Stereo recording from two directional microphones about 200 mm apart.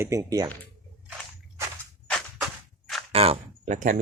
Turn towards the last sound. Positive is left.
turn(degrees=-40)  # may be behind; listen again after turning